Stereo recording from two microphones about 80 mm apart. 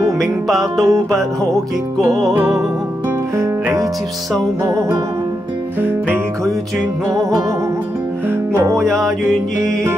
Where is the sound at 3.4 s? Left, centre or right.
Right.